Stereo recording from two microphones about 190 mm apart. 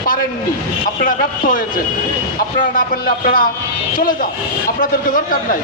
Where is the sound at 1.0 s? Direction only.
45° left (ahead or behind).